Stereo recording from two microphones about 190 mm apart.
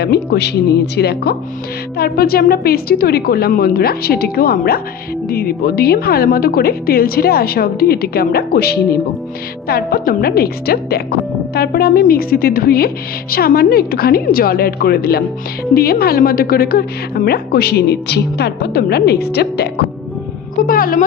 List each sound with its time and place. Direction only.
0.0 s a woman's voice: 60° left (ahead or behind)
20.6 s a woman's voice: 50° left (ahead or behind)